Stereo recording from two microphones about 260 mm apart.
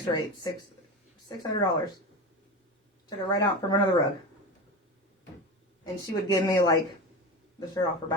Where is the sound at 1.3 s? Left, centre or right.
Centre.